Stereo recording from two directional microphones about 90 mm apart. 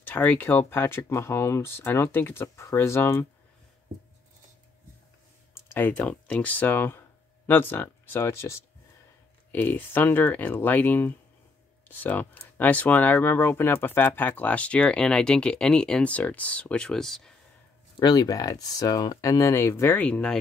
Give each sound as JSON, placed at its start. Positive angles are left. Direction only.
{"t": 0.0, "sound": "speech", "side_deg": 20}
{"t": 5.7, "sound": "speech", "side_deg": 20}
{"t": 17.9, "sound": "speech", "side_deg": 50}
{"t": 20.0, "sound": "speech", "side_deg": 10}